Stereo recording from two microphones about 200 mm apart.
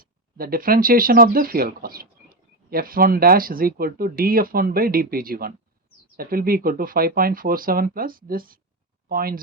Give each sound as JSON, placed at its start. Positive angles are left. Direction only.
{"t": 0.0, "sound": "speech", "side_deg": -45}